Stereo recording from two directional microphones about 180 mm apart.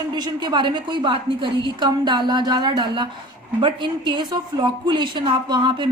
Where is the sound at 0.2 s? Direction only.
25° right (ahead or behind).